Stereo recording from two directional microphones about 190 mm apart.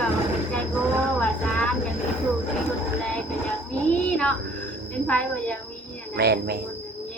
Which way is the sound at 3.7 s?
5° left (ahead or behind).